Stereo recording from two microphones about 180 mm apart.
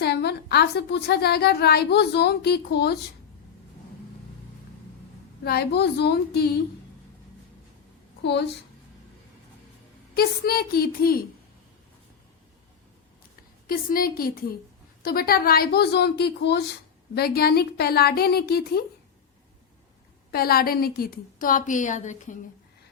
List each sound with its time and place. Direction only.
0.0 s a woman's voice: 65° left (ahead or behind)
5.4 s a woman's voice: 60° left (ahead or behind)
8.2 s a woman's voice: 70° left (ahead or behind)
10.2 s a woman's voice: 55° left (ahead or behind)
13.7 s a woman's voice: 55° left (ahead or behind)
20.3 s a woman's voice: 55° left (ahead or behind)